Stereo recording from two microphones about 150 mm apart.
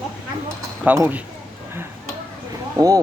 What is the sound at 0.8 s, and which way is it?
Speech, 15° right (ahead or behind).